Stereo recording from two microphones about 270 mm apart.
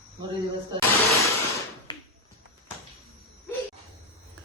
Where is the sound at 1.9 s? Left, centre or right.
Centre.